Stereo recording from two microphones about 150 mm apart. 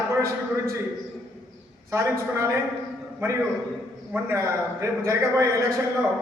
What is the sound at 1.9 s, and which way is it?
Speech, 20° right (ahead or behind).